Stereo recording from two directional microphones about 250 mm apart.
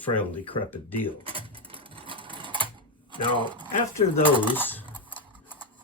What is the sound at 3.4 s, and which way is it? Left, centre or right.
Speech, centre.